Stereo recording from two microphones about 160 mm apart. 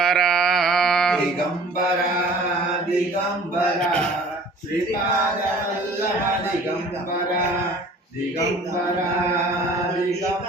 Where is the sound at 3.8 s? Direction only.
5° left (ahead or behind).